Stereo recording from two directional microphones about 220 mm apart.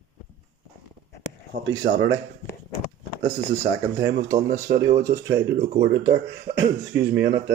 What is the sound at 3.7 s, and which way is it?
Speech, 60° right (ahead or behind).